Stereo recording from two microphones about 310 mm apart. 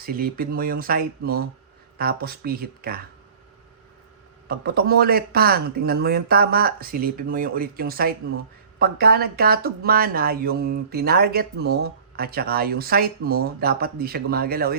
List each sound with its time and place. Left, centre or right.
0.0 s speech: right
4.4 s speech: right